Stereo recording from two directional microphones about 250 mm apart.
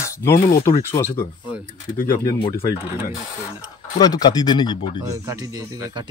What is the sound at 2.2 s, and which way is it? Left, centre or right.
Speech, centre.